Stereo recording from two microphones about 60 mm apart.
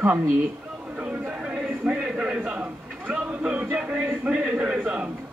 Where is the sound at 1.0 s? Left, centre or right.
Centre.